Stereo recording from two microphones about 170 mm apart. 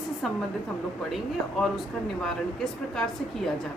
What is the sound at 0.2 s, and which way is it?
A woman's voice, centre (ahead or behind).